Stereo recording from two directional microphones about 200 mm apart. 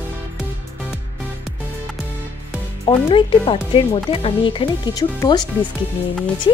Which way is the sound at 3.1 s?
25° left (ahead or behind).